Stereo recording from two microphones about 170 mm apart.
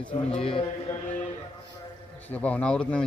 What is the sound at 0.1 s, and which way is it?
Speech, 35° left (ahead or behind).